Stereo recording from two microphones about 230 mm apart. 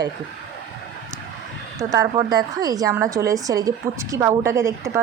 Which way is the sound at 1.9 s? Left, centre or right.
Centre.